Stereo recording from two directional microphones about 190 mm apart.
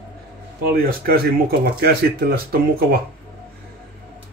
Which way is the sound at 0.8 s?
55° right (ahead or behind).